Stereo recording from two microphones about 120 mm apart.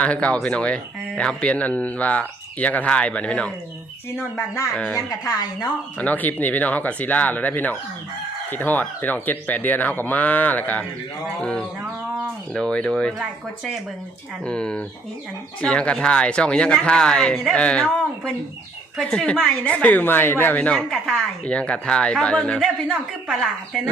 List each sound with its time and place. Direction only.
0.0 s speech: 10° left (ahead or behind)
4.4 s speech: 25° left (ahead or behind)
4.7 s speech: 10° left (ahead or behind)
5.2 s speech: 35° left (ahead or behind)
6.0 s speech: 15° left (ahead or behind)
14.4 s speech: 10° left (ahead or behind)